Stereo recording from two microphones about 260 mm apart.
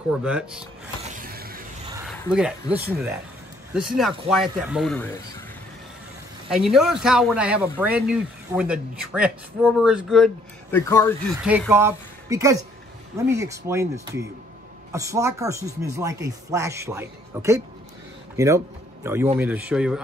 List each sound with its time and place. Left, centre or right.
0.1 s speech: centre
1.1 s vehicle: right
2.0 s a sound: centre
2.3 s speech: centre
6.5 s speech: centre
11.4 s a man's voice: centre